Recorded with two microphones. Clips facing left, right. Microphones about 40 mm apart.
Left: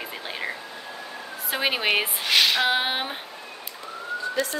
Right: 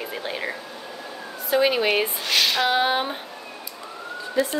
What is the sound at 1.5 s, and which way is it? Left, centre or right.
Speech, centre.